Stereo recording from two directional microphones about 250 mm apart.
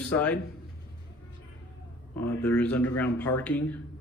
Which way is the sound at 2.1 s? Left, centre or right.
Centre.